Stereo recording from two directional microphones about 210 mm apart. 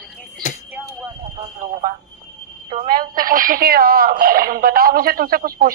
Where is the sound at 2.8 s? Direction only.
40° right (ahead or behind).